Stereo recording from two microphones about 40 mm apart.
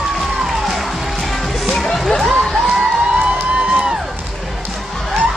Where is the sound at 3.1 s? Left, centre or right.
Right.